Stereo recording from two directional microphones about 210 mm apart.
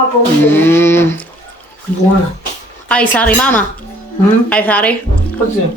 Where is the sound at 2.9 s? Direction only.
5° left (ahead or behind).